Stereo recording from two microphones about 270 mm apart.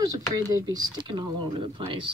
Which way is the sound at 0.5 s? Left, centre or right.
Centre.